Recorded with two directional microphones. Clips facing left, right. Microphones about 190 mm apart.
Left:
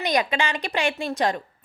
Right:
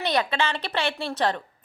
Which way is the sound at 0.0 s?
15° left (ahead or behind).